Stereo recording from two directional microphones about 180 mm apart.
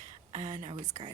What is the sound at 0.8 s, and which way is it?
Speech, 20° right (ahead or behind).